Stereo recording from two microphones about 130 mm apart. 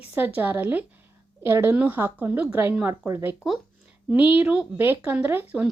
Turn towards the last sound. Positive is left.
turn(degrees=-15)  # may be behind; listen again after turning